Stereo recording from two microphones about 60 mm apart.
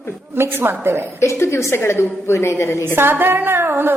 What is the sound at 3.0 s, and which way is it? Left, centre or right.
Speech, right.